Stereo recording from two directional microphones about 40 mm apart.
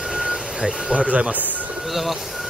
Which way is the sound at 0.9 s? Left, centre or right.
Right.